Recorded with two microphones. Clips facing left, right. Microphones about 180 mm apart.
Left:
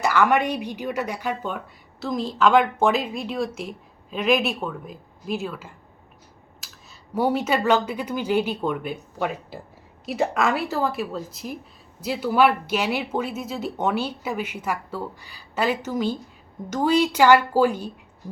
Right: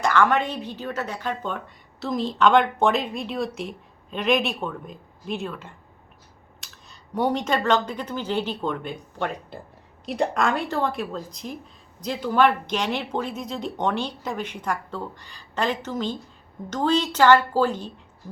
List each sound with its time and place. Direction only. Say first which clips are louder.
0.0 s speech: left 1 dB; 10° left (ahead or behind)
6.6 s a sound: left 1 dB; centre (ahead or behind)
7.1 s speech: left 1 dB; 5° left (ahead or behind)